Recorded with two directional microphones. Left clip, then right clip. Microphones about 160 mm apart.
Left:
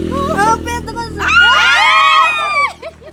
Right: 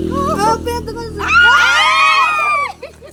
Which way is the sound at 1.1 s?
10° left (ahead or behind).